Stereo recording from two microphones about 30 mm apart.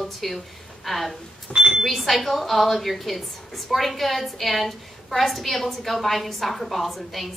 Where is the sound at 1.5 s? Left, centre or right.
Centre.